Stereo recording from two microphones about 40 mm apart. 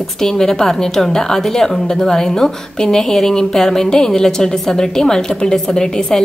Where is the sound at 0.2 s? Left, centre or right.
Centre.